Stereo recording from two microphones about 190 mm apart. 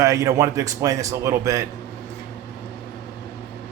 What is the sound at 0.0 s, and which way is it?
Speech, 15° right (ahead or behind).